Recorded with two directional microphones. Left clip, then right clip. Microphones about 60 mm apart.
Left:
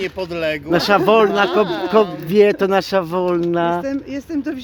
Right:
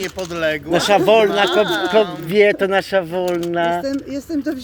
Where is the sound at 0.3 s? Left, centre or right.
Left.